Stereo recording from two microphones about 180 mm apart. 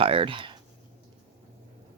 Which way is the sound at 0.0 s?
30° right (ahead or behind).